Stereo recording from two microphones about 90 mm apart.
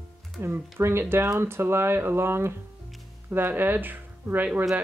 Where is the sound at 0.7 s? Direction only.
25° right (ahead or behind).